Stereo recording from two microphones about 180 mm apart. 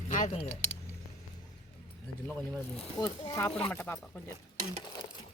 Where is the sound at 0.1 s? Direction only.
45° left (ahead or behind).